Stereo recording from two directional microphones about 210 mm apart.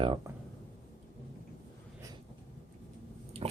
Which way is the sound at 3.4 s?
30° right (ahead or behind).